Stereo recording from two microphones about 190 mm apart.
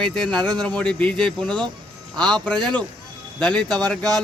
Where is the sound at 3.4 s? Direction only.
5° left (ahead or behind).